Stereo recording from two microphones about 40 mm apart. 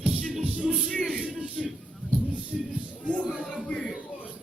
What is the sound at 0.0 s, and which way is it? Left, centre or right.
Music, right.